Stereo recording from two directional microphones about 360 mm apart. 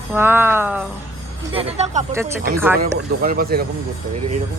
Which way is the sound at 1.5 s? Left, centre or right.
Centre.